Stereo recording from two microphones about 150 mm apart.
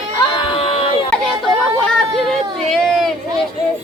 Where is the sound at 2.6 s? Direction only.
Centre (ahead or behind).